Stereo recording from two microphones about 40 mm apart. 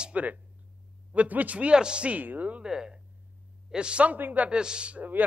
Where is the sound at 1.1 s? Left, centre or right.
Right.